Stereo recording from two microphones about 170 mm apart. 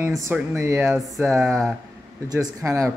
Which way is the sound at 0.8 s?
Centre (ahead or behind).